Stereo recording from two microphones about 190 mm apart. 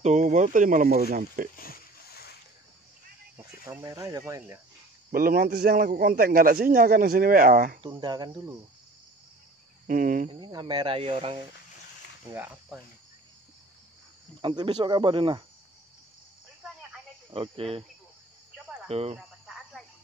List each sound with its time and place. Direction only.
0.0 s a man's voice: 35° right (ahead or behind)
1.6 s a sound: 55° left (ahead or behind)
3.6 s speech: 15° right (ahead or behind)
5.1 s a man's voice: 50° right (ahead or behind)
7.8 s speech: 25° right (ahead or behind)
9.8 s a man's voice: 45° right (ahead or behind)
10.4 s speech: 20° right (ahead or behind)
12.3 s speech: 10° right (ahead or behind)
14.4 s speech: 25° right (ahead or behind)
17.3 s speech: 30° right (ahead or behind)
18.9 s speech: 30° right (ahead or behind)
19.1 s cricket: centre (ahead or behind)